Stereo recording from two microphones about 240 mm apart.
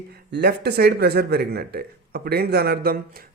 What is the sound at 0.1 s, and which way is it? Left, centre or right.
Speech, right.